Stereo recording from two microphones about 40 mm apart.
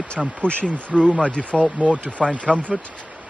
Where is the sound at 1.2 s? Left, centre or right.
Left.